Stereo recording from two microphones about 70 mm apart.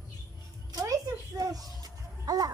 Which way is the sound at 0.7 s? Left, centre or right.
Right.